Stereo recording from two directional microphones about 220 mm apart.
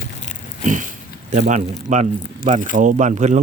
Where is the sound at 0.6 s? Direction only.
35° right (ahead or behind).